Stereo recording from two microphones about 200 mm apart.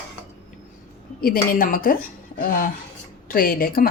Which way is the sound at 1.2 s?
45° left (ahead or behind).